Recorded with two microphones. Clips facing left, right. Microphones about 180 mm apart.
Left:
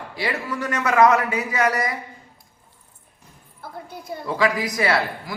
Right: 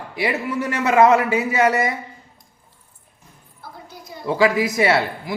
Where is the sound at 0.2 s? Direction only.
20° right (ahead or behind).